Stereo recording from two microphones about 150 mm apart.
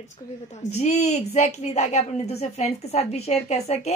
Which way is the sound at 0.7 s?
50° left (ahead or behind).